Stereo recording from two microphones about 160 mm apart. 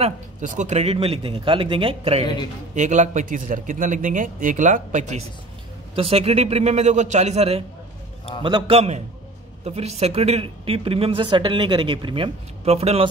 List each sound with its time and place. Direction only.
0.0 s speech: 50° right (ahead or behind)
2.7 s a man's voice: 50° right (ahead or behind)
5.9 s a man's voice: 40° right (ahead or behind)